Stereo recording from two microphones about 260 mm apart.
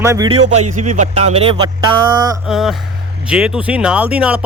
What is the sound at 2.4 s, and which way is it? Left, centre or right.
Speech, centre.